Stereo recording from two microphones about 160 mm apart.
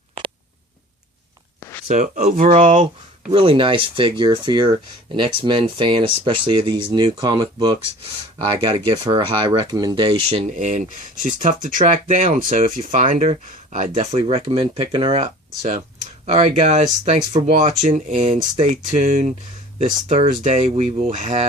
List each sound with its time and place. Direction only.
1.9 s speech: 50° right (ahead or behind)
3.3 s speech: 35° right (ahead or behind)
10.5 s speech: 50° right (ahead or behind)